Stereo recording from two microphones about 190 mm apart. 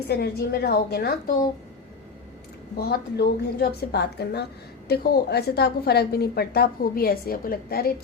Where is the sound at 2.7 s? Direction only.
55° left (ahead or behind).